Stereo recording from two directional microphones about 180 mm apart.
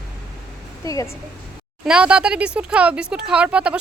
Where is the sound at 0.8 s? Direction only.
20° left (ahead or behind).